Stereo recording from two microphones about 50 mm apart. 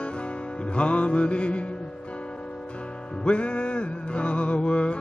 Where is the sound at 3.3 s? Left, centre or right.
Left.